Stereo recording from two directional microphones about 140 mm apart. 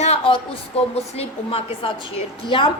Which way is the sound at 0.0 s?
45° left (ahead or behind).